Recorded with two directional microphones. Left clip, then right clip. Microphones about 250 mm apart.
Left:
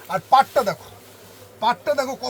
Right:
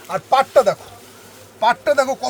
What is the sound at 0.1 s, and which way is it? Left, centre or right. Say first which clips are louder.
Speech: right 1 dB; right.